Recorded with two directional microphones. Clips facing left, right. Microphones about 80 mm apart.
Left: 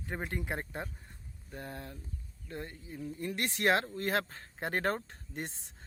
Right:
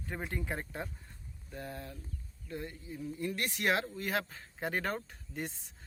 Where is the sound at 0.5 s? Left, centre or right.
Left.